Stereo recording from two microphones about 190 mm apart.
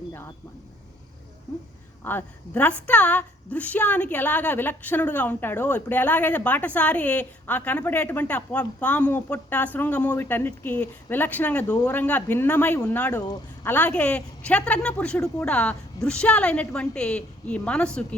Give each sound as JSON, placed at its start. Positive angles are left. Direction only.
{"t": 2.0, "sound": "a woman's voice", "side_deg": 10}
{"t": 11.7, "sound": "speech", "side_deg": 20}
{"t": 11.9, "sound": "a woman's voice", "side_deg": 10}